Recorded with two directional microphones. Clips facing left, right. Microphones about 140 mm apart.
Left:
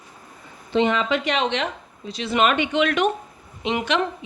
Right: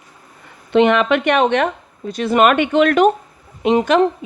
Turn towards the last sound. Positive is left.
turn(degrees=-35)  # may be behind; listen again after turning